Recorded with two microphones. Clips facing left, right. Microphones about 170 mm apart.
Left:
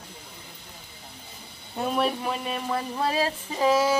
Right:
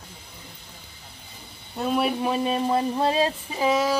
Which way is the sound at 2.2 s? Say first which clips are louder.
Right 6 dB; 30° right (ahead or behind).